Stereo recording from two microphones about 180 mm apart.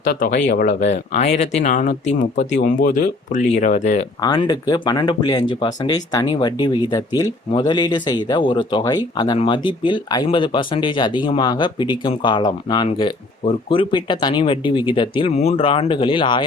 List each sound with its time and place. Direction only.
0.0 s speech: 50° left (ahead or behind)
4.2 s speech: 25° left (ahead or behind)